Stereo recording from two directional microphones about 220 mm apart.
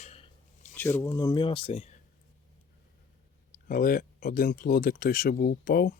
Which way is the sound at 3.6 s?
40° left (ahead or behind).